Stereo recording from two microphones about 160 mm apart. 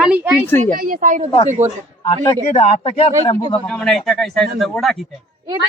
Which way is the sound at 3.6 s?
Centre (ahead or behind).